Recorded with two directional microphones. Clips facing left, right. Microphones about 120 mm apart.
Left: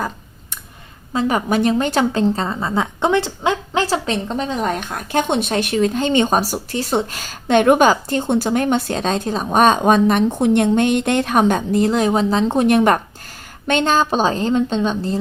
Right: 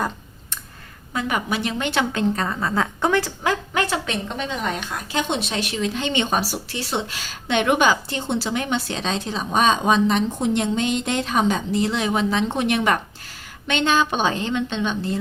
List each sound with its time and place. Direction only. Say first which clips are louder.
1.1 s a woman's voice: left 6 dB; 35° left (ahead or behind)